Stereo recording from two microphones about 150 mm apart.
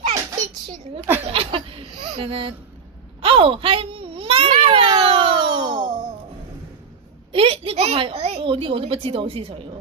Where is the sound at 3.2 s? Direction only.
40° right (ahead or behind).